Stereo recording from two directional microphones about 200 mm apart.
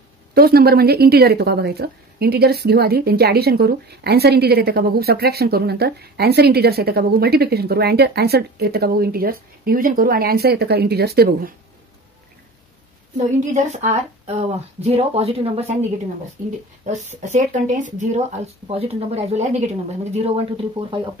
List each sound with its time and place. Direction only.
0.3 s a woman's voice: 50° right (ahead or behind)
13.2 s speech: 35° right (ahead or behind)
16.8 s speech: 35° right (ahead or behind)